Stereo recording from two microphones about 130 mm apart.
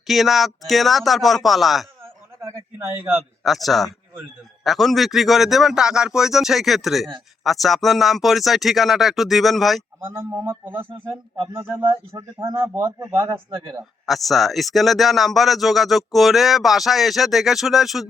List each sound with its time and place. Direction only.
0.1 s speech: centre (ahead or behind)
3.4 s speech: centre (ahead or behind)
10.2 s a man's voice: 15° right (ahead or behind)
12.1 s speech: 30° right (ahead or behind)
12.5 s speech: 20° right (ahead or behind)
13.2 s speech: 30° right (ahead or behind)
14.1 s speech: centre (ahead or behind)